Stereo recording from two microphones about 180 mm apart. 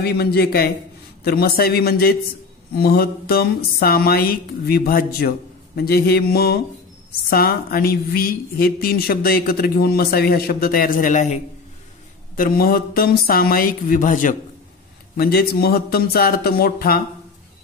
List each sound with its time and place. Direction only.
0.0 s a woman's voice: 60° left (ahead or behind); by 11.4 s 40° left (ahead or behind)
12.4 s speech: 55° left (ahead or behind)
15.1 s a woman's voice: 60° left (ahead or behind)